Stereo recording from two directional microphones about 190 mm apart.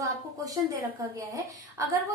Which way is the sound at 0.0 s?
20° right (ahead or behind).